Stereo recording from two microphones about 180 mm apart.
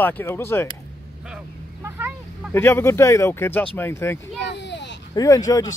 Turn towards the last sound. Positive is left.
turn(degrees=20)  # may be behind; listen again after turning